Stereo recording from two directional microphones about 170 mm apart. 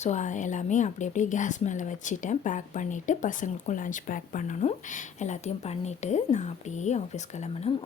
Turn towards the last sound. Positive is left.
turn(degrees=40)  # may be behind; listen again after turning